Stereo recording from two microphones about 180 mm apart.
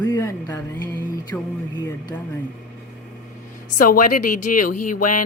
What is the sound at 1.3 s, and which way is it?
Speech, 25° left (ahead or behind).